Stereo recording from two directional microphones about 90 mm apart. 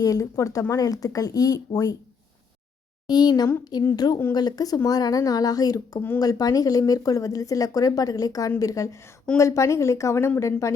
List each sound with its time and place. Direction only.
0.0 s speech: 40° left (ahead or behind)
3.1 s speech: 50° left (ahead or behind); by 10.8 s 35° left (ahead or behind)